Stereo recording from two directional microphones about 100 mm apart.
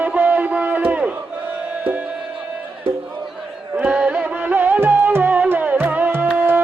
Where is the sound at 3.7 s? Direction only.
15° right (ahead or behind).